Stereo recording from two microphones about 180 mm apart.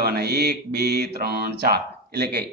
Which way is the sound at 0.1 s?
65° right (ahead or behind).